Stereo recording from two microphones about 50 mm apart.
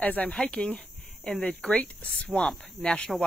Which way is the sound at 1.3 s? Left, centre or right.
Left.